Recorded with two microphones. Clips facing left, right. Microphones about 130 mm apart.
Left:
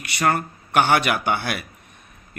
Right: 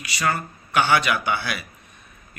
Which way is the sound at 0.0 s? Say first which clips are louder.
Left 3 dB; 55° left (ahead or behind).